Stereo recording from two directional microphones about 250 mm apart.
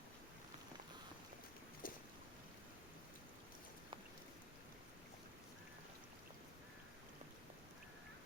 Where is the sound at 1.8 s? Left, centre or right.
Left.